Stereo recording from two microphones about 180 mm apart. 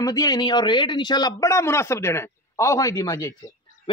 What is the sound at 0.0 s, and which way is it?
Speech, 20° left (ahead or behind).